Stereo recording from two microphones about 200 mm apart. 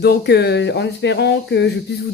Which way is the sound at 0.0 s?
55° left (ahead or behind).